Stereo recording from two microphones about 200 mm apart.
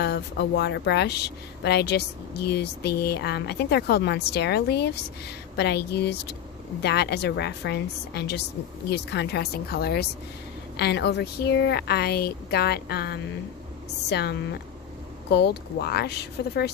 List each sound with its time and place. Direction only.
0.0 s speech: 55° left (ahead or behind)